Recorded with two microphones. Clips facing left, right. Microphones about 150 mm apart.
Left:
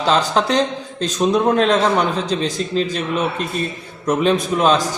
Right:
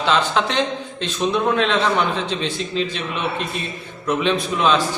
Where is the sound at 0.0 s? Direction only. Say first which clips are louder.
Left 2 dB; 40° left (ahead or behind).